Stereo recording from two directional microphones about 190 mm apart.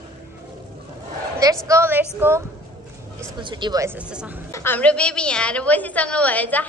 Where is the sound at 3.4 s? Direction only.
25° right (ahead or behind); by 4.4 s 5° right (ahead or behind).